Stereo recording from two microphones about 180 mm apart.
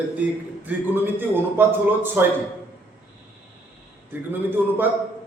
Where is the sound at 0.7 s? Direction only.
10° right (ahead or behind).